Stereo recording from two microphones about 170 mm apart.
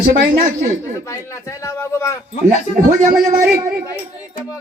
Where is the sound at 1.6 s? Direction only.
15° left (ahead or behind).